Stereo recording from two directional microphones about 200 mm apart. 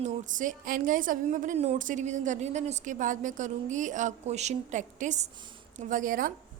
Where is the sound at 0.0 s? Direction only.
40° right (ahead or behind).